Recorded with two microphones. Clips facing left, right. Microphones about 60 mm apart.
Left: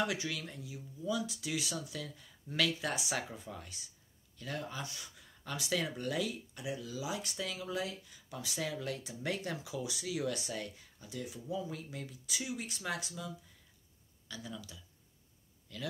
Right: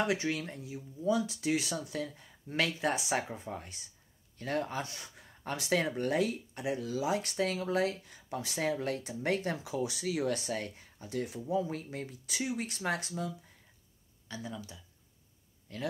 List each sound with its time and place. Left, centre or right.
0.0 s speech: right
14.2 s speech: right